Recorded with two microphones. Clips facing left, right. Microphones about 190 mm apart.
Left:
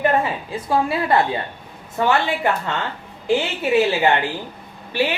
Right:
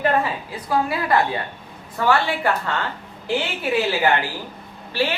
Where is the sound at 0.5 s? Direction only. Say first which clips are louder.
Left 2 dB; 25° left (ahead or behind).